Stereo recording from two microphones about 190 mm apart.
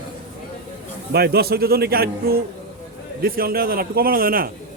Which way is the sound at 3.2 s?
50° right (ahead or behind).